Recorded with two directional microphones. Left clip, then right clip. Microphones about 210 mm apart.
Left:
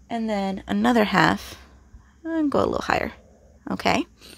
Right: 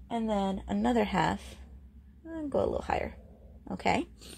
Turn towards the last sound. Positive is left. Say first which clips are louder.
# left 7 dB
turn(degrees=30)  # may be behind; listen again after turning